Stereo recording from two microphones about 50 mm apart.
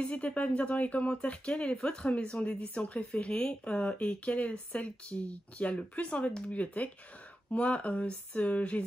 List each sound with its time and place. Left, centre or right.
0.0 s speech: left